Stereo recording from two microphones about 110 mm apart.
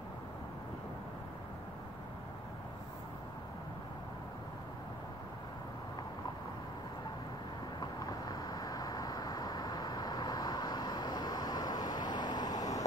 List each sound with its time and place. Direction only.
7.8 s vehicle: 35° left (ahead or behind)